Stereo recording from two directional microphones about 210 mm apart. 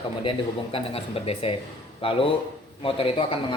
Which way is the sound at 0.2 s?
25° left (ahead or behind).